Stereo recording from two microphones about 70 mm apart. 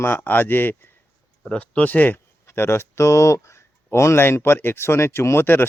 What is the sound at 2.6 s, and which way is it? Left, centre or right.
Speech, left.